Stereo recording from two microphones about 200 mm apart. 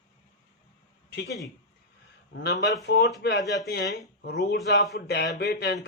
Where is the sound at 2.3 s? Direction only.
55° left (ahead or behind).